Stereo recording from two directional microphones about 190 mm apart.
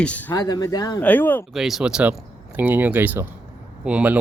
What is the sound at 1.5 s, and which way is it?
Speech, centre (ahead or behind).